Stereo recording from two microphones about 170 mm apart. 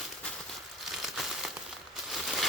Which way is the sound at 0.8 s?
Centre (ahead or behind).